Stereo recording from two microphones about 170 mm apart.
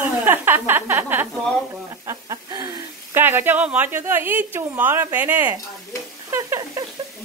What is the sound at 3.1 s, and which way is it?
A woman's voice, 10° right (ahead or behind).